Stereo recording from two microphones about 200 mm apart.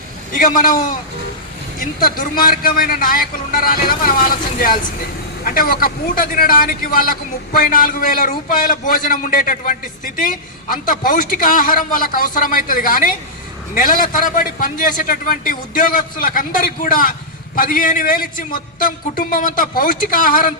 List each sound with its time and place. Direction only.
0.3 s a man's voice: 40° left (ahead or behind)
1.8 s a man's voice: 45° left (ahead or behind)